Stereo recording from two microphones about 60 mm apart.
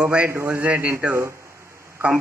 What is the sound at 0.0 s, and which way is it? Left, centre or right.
Speech, right.